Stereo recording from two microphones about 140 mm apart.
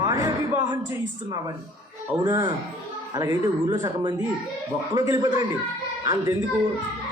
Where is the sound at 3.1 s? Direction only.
25° right (ahead or behind).